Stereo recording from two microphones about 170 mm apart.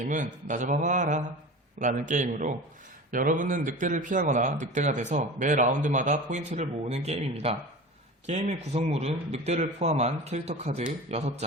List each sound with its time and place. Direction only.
0.1 s speech: 50° right (ahead or behind)